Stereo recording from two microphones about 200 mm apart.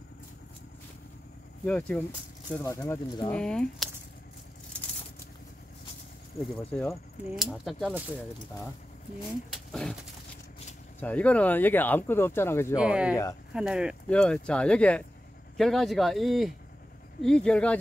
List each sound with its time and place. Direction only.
1.7 s speech: 5° left (ahead or behind)
2.6 s speech: 15° left (ahead or behind)
6.7 s speech: 5° left (ahead or behind)
9.5 s speech: centre (ahead or behind)
11.0 s speech: 5° left (ahead or behind)
12.7 s speech: 5° right (ahead or behind)
13.1 s speech: 15° left (ahead or behind)
13.5 s speech: 5° right (ahead or behind)